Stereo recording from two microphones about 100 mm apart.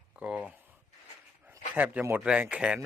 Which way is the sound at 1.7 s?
15° right (ahead or behind).